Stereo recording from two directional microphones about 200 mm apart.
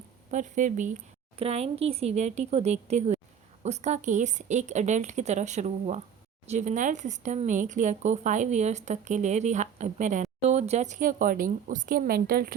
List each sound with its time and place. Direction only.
0.3 s a woman's voice: 40° right (ahead or behind)